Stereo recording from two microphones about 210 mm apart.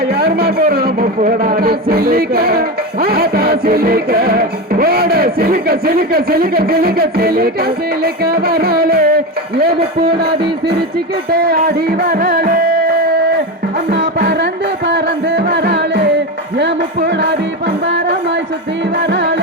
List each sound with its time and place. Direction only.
0.1 s a man's voice: 50° right (ahead or behind)
11.3 s music: 45° right (ahead or behind)
13.9 s music: 50° right (ahead or behind)
19.0 s music: 55° right (ahead or behind)